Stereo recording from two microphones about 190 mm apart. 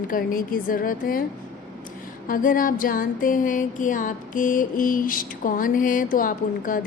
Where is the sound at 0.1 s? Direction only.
45° left (ahead or behind).